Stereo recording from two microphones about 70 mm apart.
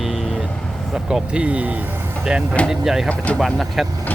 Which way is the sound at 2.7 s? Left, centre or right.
Centre.